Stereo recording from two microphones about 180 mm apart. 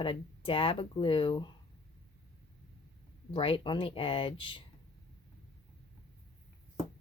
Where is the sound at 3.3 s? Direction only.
30° left (ahead or behind).